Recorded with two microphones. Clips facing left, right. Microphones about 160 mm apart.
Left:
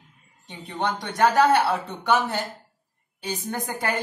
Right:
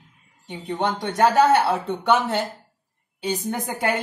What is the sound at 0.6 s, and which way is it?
A woman's voice, 25° right (ahead or behind).